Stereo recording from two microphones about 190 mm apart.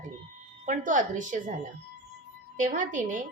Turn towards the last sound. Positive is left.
turn(degrees=-40)  # may be behind; listen again after turning